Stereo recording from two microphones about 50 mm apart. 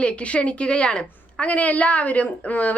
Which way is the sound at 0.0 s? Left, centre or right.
Left.